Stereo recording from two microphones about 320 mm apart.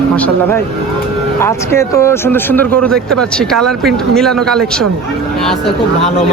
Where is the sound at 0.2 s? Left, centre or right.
Centre.